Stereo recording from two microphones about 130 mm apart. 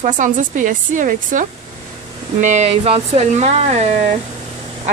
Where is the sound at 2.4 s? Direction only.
60° right (ahead or behind).